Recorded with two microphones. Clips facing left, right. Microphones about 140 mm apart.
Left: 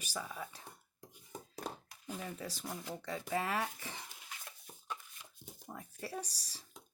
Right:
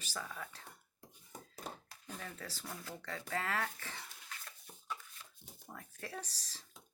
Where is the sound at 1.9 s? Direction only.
15° left (ahead or behind).